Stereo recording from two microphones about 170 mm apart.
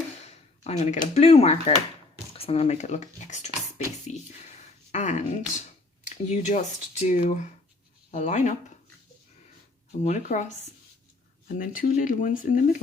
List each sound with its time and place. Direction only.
0.6 s speech: 40° left (ahead or behind)
4.0 s a sound: 45° left (ahead or behind)
6.1 s speech: 40° left (ahead or behind)
10.0 s speech: 40° left (ahead or behind)
11.4 s speech: 55° left (ahead or behind)